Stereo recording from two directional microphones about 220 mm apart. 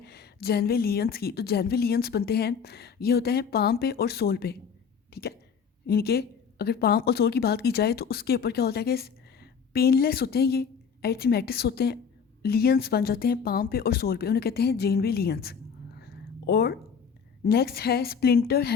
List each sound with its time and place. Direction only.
0.0 s a woman's voice: 45° left (ahead or behind)
5.8 s a woman's voice: 45° left (ahead or behind)
16.0 s a sound: 45° left (ahead or behind)
17.4 s a woman's voice: 45° left (ahead or behind)